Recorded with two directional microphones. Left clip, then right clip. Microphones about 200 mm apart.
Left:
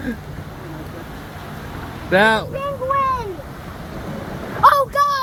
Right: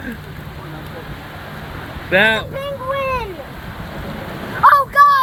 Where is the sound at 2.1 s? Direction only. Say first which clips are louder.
Right 1 dB; 20° left (ahead or behind).